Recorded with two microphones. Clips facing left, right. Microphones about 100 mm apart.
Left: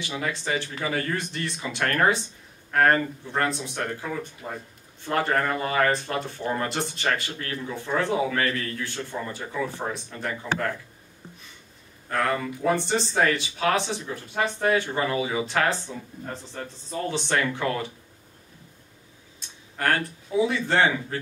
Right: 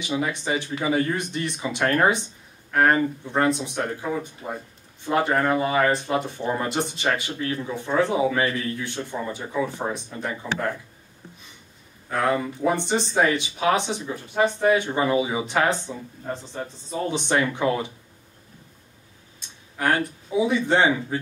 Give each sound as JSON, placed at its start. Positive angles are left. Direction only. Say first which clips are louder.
{"t": 0.0, "sound": "speech", "louder": "right 4 dB", "side_deg": -20}
{"t": 12.1, "sound": "speech", "louder": "right 2 dB", "side_deg": -15}
{"t": 19.8, "sound": "speech", "louder": "right 2 dB", "side_deg": -15}